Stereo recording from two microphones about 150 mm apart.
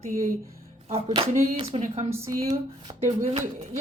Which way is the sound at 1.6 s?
40° right (ahead or behind).